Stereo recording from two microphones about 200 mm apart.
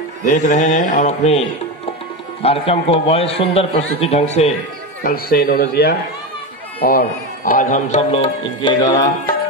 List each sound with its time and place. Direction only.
0.2 s mantra: 40° left (ahead or behind)
2.4 s a man's voice: 30° left (ahead or behind)
4.0 s mantra: 30° left (ahead or behind)
5.0 s a man's voice: 45° left (ahead or behind)
8.1 s a man's voice: 25° left (ahead or behind)